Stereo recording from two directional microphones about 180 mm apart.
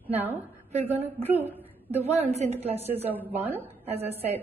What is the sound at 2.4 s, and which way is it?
Speech, 35° right (ahead or behind).